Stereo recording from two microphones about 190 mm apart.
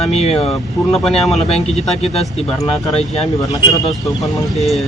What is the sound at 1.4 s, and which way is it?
Speech, 35° left (ahead or behind).